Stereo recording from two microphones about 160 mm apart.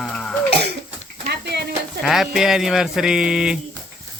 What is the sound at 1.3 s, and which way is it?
Stir, 90° right.